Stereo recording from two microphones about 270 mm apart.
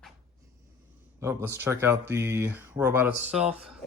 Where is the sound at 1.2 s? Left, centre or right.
Centre.